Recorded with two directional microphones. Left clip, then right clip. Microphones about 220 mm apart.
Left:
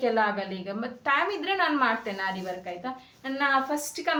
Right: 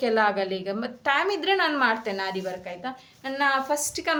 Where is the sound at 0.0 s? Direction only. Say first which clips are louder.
Right 3 dB; 50° right (ahead or behind).